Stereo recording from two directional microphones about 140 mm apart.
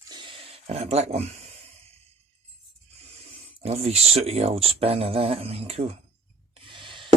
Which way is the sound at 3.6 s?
45° right (ahead or behind).